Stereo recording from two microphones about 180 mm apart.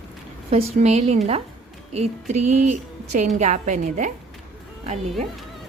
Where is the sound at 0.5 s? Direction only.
35° right (ahead or behind).